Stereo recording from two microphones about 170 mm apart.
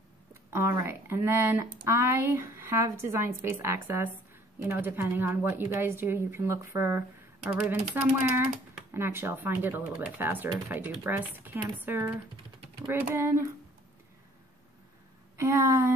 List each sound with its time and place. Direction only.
0.5 s speech: 15° right (ahead or behind)
15.3 s speech: 15° right (ahead or behind)